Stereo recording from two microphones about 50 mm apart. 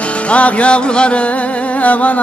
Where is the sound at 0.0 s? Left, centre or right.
Left.